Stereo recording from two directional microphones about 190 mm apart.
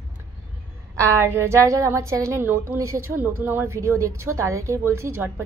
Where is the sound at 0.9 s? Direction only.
15° right (ahead or behind).